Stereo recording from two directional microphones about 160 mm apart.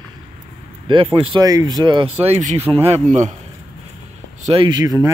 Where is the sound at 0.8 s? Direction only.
35° right (ahead or behind).